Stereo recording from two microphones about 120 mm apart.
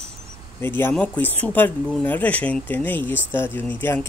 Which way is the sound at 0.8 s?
20° left (ahead or behind).